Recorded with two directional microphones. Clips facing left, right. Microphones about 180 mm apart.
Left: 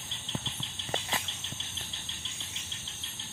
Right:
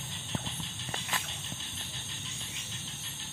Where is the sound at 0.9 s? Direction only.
25° left (ahead or behind).